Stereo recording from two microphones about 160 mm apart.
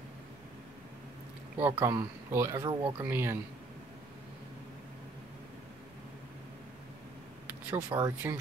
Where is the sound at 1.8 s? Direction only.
15° right (ahead or behind).